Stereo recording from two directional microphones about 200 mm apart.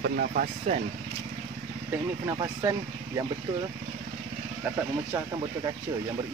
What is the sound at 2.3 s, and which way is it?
Speech, 20° right (ahead or behind).